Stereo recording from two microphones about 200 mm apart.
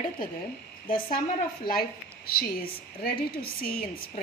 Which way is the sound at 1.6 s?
50° left (ahead or behind).